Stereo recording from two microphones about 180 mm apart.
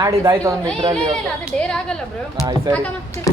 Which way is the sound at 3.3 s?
20° left (ahead or behind).